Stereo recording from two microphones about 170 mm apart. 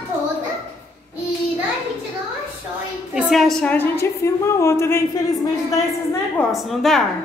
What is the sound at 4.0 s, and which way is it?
A woman's voice, 15° left (ahead or behind).